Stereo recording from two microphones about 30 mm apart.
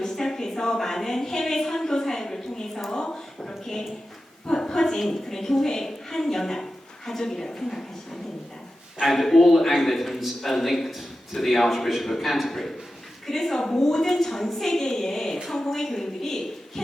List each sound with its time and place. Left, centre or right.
0.0 s a sound: centre
5.3 s a woman's voice: centre
9.0 s a woman's voice: centre